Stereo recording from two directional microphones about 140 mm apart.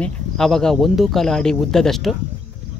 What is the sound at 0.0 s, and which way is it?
Speech, 5° left (ahead or behind).